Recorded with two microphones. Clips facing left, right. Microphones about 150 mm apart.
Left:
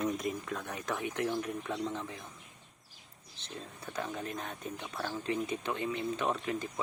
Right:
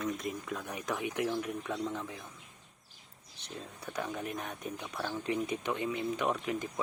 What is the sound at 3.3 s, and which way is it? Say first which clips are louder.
Speech: even; 15° right (ahead or behind).